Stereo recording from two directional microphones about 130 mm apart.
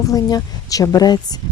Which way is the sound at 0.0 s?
30° left (ahead or behind).